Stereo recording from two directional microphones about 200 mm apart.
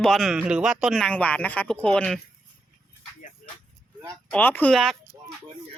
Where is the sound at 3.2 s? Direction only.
40° left (ahead or behind).